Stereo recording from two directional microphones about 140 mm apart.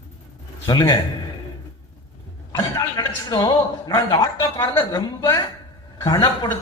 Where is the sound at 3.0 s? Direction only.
25° left (ahead or behind).